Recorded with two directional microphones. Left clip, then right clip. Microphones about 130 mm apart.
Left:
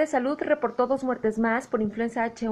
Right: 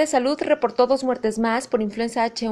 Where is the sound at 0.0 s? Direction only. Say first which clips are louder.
Right 5 dB; 25° right (ahead or behind).